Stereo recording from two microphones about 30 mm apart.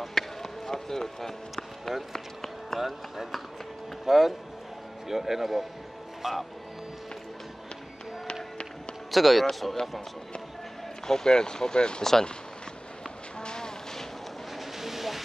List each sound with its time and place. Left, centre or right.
0.0 s a sound: centre
2.7 s speech: centre
9.1 s speech: centre
11.1 s speech: left
12.0 s speech: centre
13.4 s vehicle: left
14.8 s train: centre